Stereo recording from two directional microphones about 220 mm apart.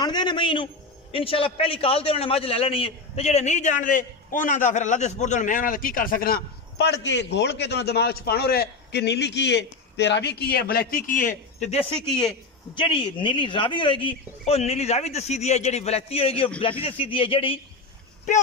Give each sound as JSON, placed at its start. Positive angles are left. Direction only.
{"t": 0.0, "sound": "a man's voice", "side_deg": 20}